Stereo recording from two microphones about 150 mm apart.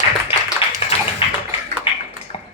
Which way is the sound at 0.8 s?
40° left (ahead or behind).